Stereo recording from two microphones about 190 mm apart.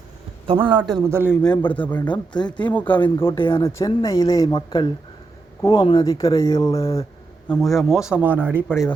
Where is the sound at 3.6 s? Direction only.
15° left (ahead or behind).